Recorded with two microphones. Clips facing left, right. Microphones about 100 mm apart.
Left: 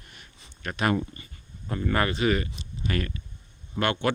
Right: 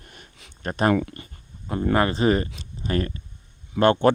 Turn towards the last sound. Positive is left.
turn(degrees=-35)  # may be behind; listen again after turning